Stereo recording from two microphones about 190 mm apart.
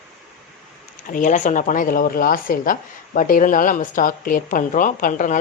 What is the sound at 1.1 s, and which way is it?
Speech, 40° left (ahead or behind).